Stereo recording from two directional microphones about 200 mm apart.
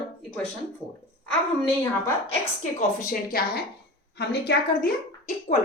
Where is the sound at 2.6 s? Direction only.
40° left (ahead or behind).